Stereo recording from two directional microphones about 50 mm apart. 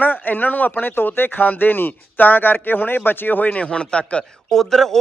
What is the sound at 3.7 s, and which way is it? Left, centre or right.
Speech, centre.